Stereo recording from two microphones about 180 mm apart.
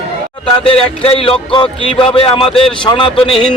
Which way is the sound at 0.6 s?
30° left (ahead or behind).